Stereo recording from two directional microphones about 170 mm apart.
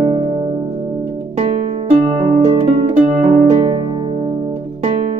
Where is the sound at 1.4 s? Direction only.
35° right (ahead or behind).